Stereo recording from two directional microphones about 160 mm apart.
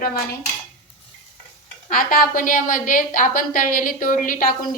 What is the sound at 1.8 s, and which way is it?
A woman's voice, 60° left (ahead or behind).